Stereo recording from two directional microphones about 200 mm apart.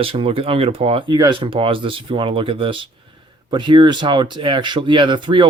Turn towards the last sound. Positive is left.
turn(degrees=-25)  # may be behind; listen again after turning